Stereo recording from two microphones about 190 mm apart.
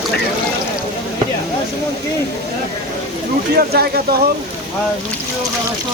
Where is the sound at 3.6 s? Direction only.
55° right (ahead or behind).